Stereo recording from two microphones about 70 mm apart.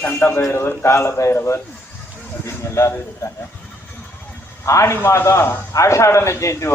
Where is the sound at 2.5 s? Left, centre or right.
Left.